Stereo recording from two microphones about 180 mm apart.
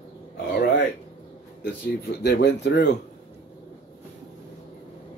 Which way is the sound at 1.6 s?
70° left (ahead or behind).